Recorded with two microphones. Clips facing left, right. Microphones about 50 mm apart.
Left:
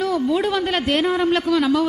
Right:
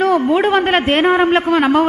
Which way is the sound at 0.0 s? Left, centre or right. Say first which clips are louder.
Right 6 dB; right.